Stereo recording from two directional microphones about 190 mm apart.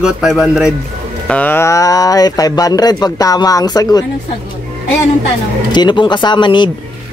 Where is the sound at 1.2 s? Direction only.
10° left (ahead or behind).